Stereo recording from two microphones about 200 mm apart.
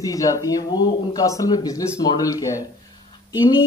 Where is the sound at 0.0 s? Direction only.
15° left (ahead or behind).